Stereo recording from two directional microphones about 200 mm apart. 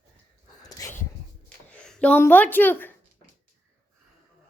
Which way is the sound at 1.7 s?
5° left (ahead or behind).